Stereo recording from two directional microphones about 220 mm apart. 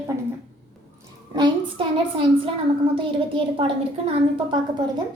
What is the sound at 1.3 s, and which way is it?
A woman's voice, 20° right (ahead or behind).